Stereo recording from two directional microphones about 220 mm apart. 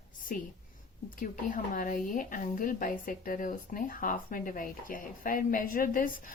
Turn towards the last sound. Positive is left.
turn(degrees=40)  # may be behind; listen again after turning